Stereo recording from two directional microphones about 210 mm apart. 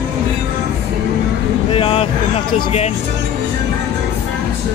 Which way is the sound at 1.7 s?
25° left (ahead or behind).